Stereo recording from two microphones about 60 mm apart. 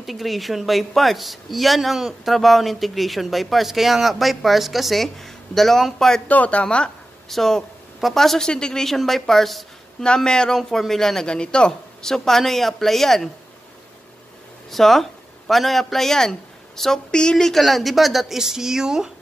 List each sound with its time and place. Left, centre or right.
0.0 s speech: centre
6.2 s speech: left
7.2 s speech: centre
10.0 s a man's voice: centre
14.7 s speech: centre